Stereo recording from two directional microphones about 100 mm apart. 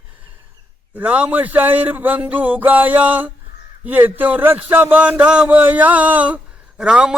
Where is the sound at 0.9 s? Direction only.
15° right (ahead or behind).